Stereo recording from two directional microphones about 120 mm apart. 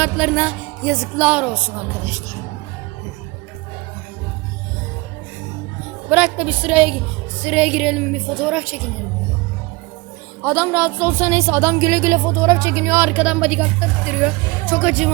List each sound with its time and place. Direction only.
0.0 s speech: 15° right (ahead or behind)
1.1 s a woman's voice: 10° right (ahead or behind)
6.1 s a woman's voice: 10° right (ahead or behind)
10.4 s a woman's voice: 15° right (ahead or behind)